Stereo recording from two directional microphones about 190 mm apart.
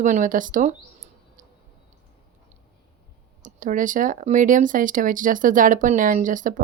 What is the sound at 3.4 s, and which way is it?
Speech, 45° right (ahead or behind).